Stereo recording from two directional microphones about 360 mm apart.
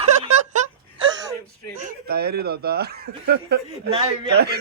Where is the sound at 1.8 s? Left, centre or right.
Right.